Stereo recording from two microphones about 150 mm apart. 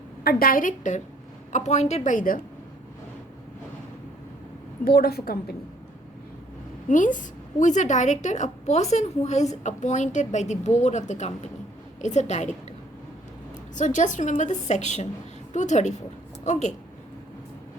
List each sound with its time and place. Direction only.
0.3 s a woman's voice: 75° left (ahead or behind)
4.9 s a woman's voice: 90° left
6.8 s a woman's voice: 60° left (ahead or behind)
13.7 s a woman's voice: 55° left (ahead or behind)